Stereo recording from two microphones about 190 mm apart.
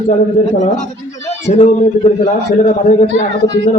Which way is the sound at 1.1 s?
35° left (ahead or behind).